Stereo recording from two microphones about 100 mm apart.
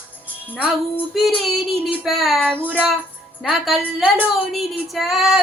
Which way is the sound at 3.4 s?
Centre (ahead or behind).